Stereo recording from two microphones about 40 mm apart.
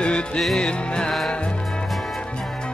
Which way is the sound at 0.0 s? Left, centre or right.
Left.